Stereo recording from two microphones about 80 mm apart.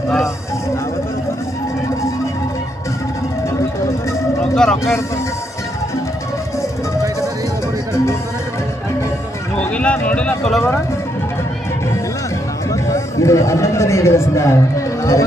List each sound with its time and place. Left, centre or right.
4.5 s speech: centre
9.6 s run: centre
12.9 s a man's voice: left